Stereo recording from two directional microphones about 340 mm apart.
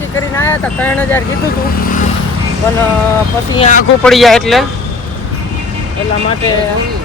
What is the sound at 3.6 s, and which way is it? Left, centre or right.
Speech, left.